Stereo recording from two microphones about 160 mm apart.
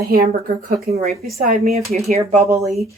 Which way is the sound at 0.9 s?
45° right (ahead or behind).